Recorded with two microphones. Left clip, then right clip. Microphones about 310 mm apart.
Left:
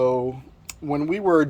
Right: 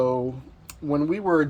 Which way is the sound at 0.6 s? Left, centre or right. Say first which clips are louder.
Right 1 dB; left.